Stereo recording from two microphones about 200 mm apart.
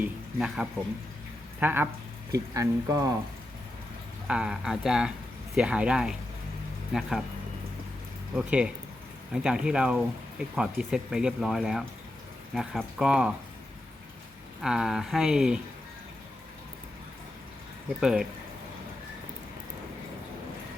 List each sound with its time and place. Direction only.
0.0 s speech: 5° right (ahead or behind)
4.3 s speech: 5° right (ahead or behind)
8.4 s speech: 5° right (ahead or behind)
14.6 s speech: centre (ahead or behind)
18.0 s speech: 5° right (ahead or behind)